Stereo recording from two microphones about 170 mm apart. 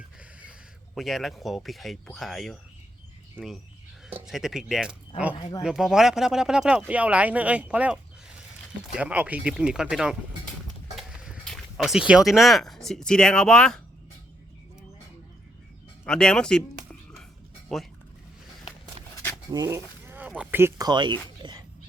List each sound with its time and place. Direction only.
0.9 s speech: centre (ahead or behind)
5.3 s speech: 25° left (ahead or behind)
5.6 s speech: 5° right (ahead or behind)
9.0 s speech: 5° right (ahead or behind)
16.0 s music: 5° left (ahead or behind)
17.7 s speech: centre (ahead or behind)
19.5 s speech: 20° right (ahead or behind)
21.4 s dog: 25° right (ahead or behind)